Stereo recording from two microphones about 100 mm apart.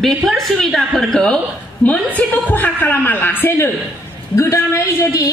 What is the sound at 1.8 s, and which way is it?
A woman's voice, 15° left (ahead or behind).